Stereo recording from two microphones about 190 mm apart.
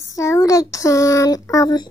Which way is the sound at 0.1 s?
15° left (ahead or behind).